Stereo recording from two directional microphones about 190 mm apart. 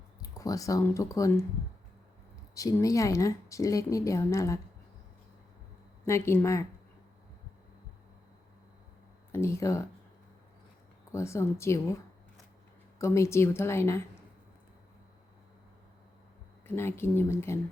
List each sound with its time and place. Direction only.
0.2 s speech: 20° left (ahead or behind)
2.6 s a woman's voice: 15° left (ahead or behind)
6.1 s a woman's voice: 15° left (ahead or behind)
9.3 s a woman's voice: 15° left (ahead or behind)
11.1 s a woman's voice: 15° left (ahead or behind)
13.0 s a woman's voice: 15° left (ahead or behind)
16.6 s a woman's voice: 10° left (ahead or behind)